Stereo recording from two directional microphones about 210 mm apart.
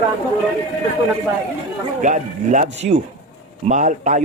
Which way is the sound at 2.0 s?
35° right (ahead or behind).